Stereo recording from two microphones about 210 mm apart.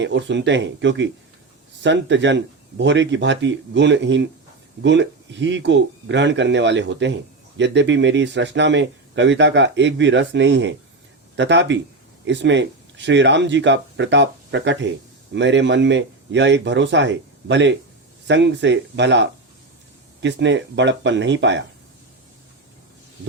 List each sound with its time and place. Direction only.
0.0 s speech: 60° right (ahead or behind)